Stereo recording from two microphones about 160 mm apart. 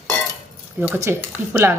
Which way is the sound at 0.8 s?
15° right (ahead or behind).